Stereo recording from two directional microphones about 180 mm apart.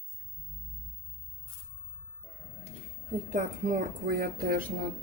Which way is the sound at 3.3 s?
45° right (ahead or behind).